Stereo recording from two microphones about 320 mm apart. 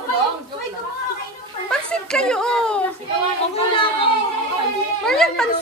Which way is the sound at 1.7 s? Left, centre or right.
Centre.